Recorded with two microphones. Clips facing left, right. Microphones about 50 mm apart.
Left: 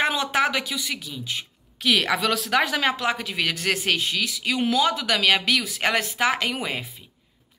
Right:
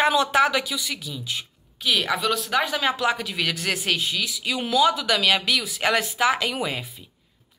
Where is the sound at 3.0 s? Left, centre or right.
Left.